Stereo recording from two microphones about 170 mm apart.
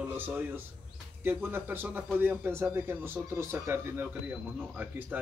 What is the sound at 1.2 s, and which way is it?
A man's voice, 10° right (ahead or behind).